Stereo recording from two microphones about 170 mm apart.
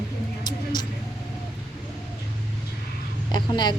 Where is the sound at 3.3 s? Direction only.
25° left (ahead or behind).